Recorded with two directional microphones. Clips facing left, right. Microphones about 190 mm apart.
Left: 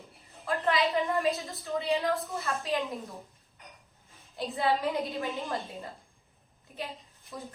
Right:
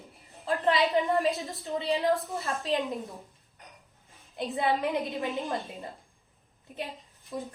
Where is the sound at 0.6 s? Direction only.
20° right (ahead or behind).